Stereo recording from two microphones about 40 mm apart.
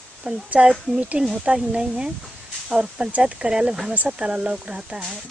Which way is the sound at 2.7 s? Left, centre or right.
Right.